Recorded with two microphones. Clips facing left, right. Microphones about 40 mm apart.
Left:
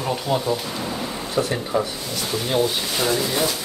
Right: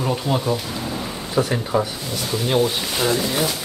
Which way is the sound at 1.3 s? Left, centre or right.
Right.